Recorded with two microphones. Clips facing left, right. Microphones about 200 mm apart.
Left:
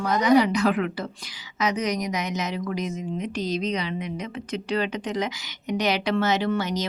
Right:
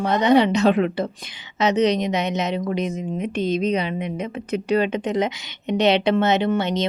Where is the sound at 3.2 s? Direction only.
55° right (ahead or behind).